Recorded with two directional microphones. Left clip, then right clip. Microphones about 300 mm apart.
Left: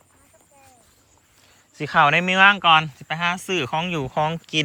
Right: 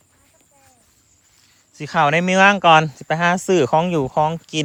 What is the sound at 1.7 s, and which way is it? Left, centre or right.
Speech, centre.